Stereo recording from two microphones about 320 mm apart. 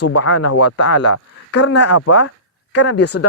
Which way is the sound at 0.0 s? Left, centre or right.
Left.